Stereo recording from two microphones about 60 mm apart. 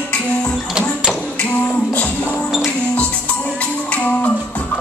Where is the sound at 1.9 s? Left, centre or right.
Left.